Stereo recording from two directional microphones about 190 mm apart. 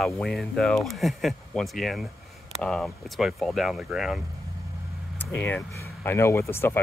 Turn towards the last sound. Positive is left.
turn(degrees=10)  # may be behind; listen again after turning